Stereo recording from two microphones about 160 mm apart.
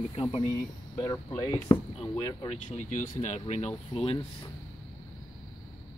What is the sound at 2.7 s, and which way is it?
Speech, 50° left (ahead or behind).